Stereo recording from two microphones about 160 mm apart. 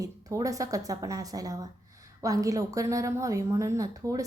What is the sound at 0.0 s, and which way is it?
A woman's voice, 20° right (ahead or behind).